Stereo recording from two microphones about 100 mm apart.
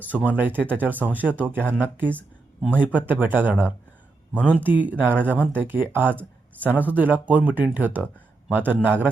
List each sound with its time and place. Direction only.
0.0 s speech: 15° right (ahead or behind)